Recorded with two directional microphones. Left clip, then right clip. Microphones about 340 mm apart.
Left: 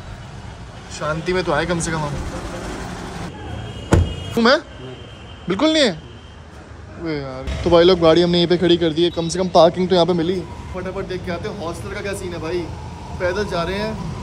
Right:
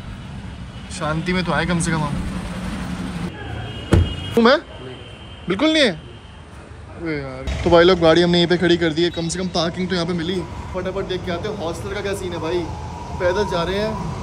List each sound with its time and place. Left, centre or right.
1.0 s speech: centre
4.4 s speech: centre
7.1 s speech: centre
7.6 s a man's voice: centre